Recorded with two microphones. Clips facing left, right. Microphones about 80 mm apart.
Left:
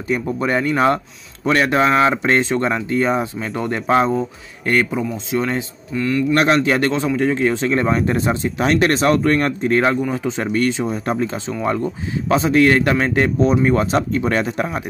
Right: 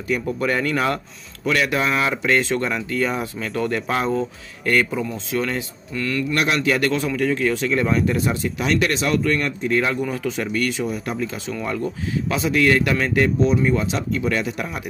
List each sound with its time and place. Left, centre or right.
0.1 s speech: left
6.3 s speech: left
10.1 s speech: left